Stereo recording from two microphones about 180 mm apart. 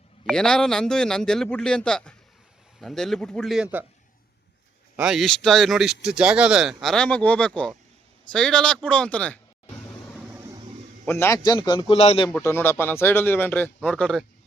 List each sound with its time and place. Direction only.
0.3 s speech: 5° left (ahead or behind)
4.9 s speech: centre (ahead or behind)
10.2 s a sound: 10° right (ahead or behind)
11.0 s a man's voice: 15° left (ahead or behind); by 12.3 s 35° left (ahead or behind)
12.3 s speech: 15° left (ahead or behind)